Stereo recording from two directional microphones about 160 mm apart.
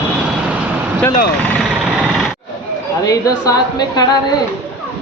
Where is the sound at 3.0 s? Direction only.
20° left (ahead or behind).